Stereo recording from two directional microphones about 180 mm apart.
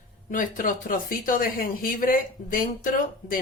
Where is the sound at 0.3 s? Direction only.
50° left (ahead or behind).